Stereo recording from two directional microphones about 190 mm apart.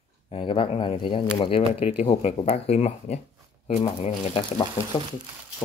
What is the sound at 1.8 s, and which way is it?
Speech, 40° left (ahead or behind).